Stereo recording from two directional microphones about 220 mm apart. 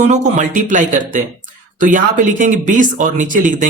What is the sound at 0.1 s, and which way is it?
Speech, 30° right (ahead or behind).